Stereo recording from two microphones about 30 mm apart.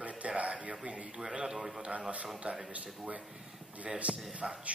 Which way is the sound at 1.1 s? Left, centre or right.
Centre.